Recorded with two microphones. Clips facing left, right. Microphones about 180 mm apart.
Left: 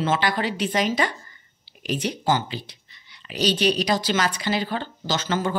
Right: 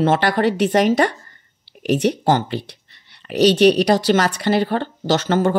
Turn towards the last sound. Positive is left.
turn(degrees=-60)  # may be behind; listen again after turning